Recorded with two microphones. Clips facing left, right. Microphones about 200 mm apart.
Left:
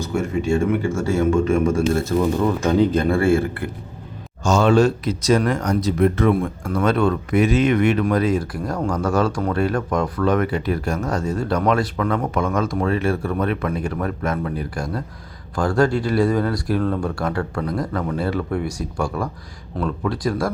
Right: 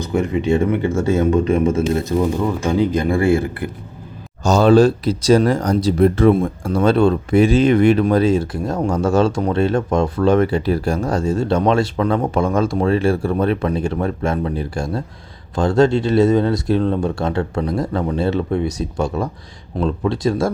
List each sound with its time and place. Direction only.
0.0 s speech: 15° right (ahead or behind)
1.4 s speech: 35° right (ahead or behind)
1.6 s speech: 20° right (ahead or behind)
4.4 s speech: 35° right (ahead or behind)